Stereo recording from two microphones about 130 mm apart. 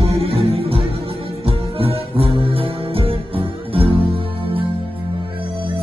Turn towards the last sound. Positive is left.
turn(degrees=-45)  # may be behind; listen again after turning